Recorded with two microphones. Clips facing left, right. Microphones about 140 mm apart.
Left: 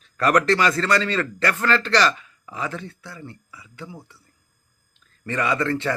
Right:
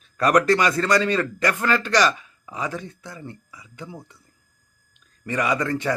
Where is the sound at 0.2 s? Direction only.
15° right (ahead or behind).